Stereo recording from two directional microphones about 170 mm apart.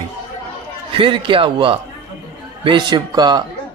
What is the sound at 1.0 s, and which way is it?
A man's voice, 30° right (ahead or behind).